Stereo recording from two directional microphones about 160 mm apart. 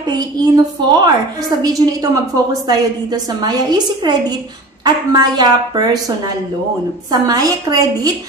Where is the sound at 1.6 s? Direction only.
25° right (ahead or behind).